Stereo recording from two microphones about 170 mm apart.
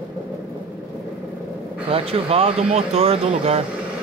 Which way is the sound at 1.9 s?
35° right (ahead or behind).